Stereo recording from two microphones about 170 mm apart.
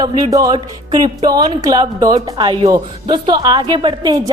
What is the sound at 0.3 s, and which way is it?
A woman's voice, 20° right (ahead or behind).